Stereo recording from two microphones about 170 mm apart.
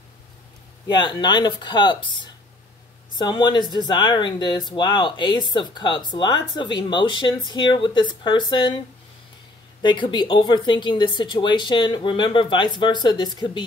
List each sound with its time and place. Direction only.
0.8 s speech: 25° left (ahead or behind)